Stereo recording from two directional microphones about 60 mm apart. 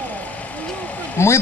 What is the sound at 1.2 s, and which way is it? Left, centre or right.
Speech, left.